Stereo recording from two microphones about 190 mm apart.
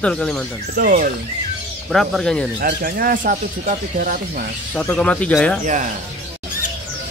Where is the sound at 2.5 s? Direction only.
55° right (ahead or behind).